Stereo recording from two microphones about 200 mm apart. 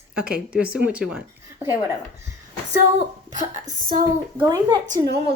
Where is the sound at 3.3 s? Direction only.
35° right (ahead or behind).